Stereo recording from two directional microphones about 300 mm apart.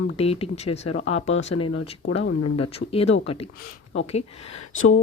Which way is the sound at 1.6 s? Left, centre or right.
Left.